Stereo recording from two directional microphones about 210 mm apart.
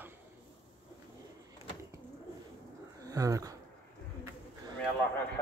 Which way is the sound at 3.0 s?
15° right (ahead or behind).